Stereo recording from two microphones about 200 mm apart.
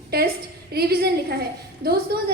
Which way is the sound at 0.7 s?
50° right (ahead or behind).